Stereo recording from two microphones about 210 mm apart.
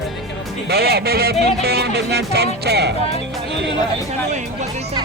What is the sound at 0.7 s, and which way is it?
Music, 50° right (ahead or behind).